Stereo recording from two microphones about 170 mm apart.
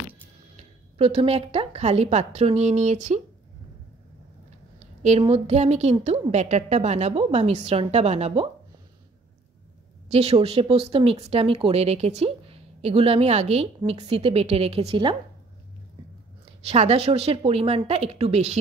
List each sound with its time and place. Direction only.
0.6 s speech: 35° right (ahead or behind)
4.7 s speech: 40° right (ahead or behind)
10.0 s speech: 40° right (ahead or behind)
16.6 s speech: 40° right (ahead or behind)